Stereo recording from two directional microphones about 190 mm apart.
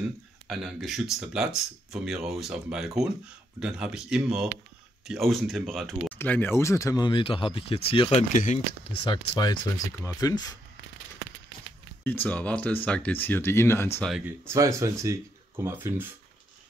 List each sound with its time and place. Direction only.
0.5 s speech: centre (ahead or behind); by 8.5 s 40° left (ahead or behind)
9.0 s speech: 25° left (ahead or behind)
12.0 s speech: 10° left (ahead or behind)
14.1 s speech: 10° right (ahead or behind)